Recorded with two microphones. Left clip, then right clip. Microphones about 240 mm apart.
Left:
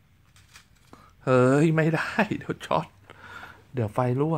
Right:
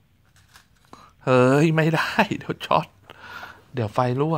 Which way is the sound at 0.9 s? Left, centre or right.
Centre.